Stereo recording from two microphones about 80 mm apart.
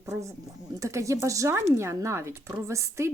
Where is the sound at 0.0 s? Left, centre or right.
Right.